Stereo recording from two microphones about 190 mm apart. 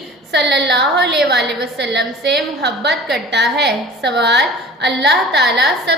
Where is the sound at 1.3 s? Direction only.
60° right (ahead or behind).